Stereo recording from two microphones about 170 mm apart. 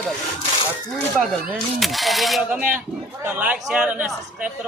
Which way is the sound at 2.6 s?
50° right (ahead or behind).